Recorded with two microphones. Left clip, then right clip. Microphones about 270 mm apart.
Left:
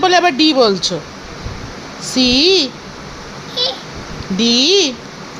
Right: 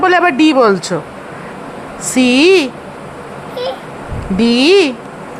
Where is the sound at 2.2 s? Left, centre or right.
Right.